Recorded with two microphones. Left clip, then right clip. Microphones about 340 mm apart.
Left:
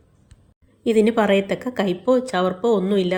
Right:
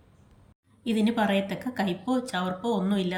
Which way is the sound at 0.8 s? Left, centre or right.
Centre.